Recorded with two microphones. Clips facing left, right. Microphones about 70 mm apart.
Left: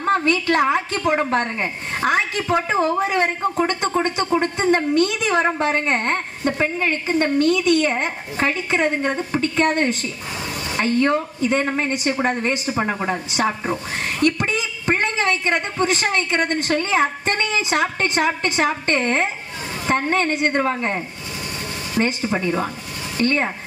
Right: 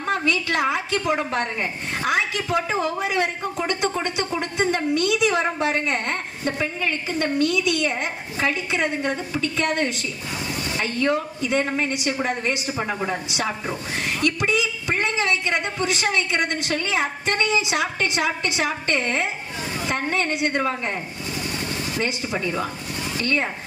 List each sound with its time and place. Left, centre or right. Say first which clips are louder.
0.1 s a woman's voice: left 4 dB; left